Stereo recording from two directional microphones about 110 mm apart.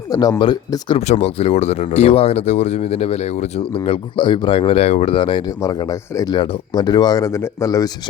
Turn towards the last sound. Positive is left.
turn(degrees=30)  # may be behind; listen again after turning